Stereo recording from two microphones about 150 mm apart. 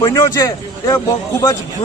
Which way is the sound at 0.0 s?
20° left (ahead or behind).